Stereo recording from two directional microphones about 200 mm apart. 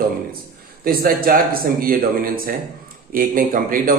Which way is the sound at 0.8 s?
50° right (ahead or behind).